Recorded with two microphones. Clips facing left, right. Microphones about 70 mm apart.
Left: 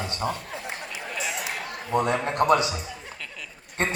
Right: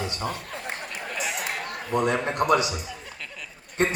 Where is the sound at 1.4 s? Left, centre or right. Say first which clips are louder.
Right 1 dB; right.